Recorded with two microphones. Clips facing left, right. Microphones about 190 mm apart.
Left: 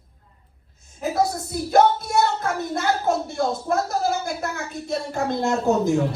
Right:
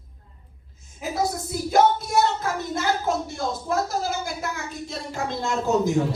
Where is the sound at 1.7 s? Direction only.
60° left (ahead or behind).